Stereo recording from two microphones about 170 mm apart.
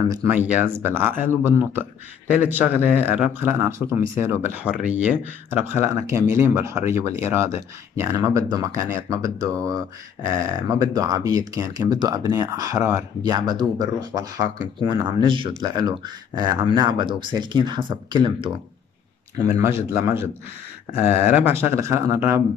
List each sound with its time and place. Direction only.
0.1 s speech: 15° right (ahead or behind)
19.5 s speech: 15° right (ahead or behind)